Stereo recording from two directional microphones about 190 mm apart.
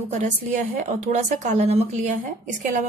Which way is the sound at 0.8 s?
40° right (ahead or behind).